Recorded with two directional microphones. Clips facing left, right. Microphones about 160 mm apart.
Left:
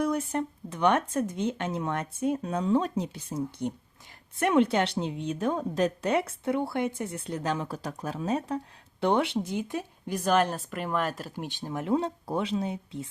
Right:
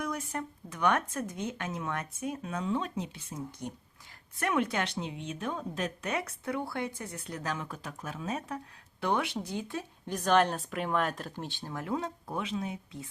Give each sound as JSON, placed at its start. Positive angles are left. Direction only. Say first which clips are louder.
{"t": 0.0, "sound": "speech", "louder": "left 8 dB", "side_deg": 30}
{"t": 4.4, "sound": "a woman's voice", "louder": "left 7 dB", "side_deg": 25}